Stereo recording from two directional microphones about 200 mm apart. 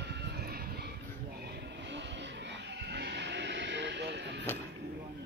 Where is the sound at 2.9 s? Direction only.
55° right (ahead or behind).